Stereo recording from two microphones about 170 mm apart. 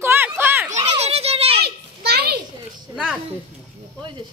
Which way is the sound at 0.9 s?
40° right (ahead or behind).